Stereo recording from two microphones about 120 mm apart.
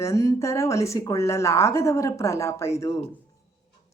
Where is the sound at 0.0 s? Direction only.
25° left (ahead or behind).